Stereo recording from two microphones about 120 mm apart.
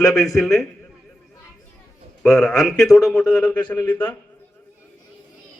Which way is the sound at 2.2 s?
Centre (ahead or behind).